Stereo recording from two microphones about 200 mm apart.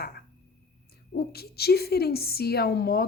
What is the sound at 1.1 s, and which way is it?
A woman's voice, 50° left (ahead or behind).